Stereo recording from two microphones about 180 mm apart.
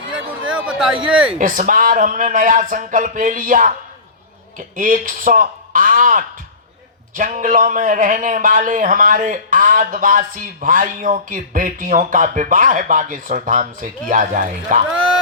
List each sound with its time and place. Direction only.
0.8 s speech: 5° right (ahead or behind)
1.4 s a man's voice: 45° right (ahead or behind)
14.8 s speech: 5° right (ahead or behind)